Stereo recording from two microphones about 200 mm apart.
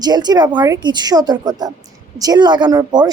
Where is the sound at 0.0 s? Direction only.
20° right (ahead or behind).